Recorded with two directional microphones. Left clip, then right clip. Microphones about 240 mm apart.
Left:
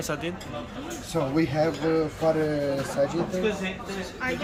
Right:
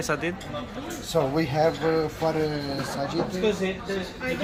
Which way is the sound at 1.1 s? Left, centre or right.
Right.